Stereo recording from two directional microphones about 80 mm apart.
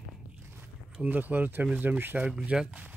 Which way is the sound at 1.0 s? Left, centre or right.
Right.